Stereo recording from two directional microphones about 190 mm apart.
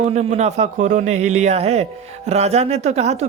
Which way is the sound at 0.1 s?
35° right (ahead or behind).